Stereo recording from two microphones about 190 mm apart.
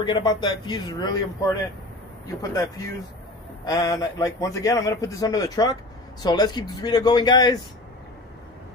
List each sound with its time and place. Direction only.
0.0 s a man's voice: 25° left (ahead or behind)